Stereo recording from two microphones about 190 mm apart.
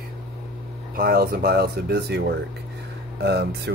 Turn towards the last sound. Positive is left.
turn(degrees=-60)  # may be behind; listen again after turning